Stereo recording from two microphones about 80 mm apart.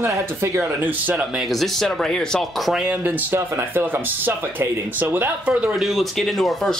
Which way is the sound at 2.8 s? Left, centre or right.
Centre.